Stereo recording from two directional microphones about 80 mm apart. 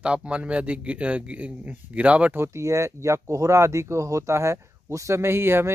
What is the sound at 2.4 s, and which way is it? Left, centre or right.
Speech, right.